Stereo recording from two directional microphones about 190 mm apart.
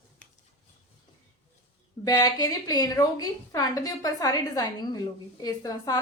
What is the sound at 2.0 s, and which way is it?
A woman's voice, 20° left (ahead or behind).